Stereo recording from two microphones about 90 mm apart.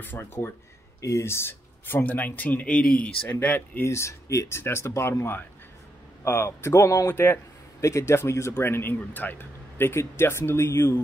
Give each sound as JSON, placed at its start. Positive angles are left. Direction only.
{"t": 0.0, "sound": "speech", "side_deg": 20}